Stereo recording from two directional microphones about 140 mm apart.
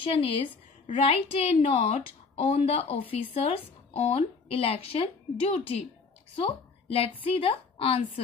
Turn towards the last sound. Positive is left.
turn(degrees=45)  # may be behind; listen again after turning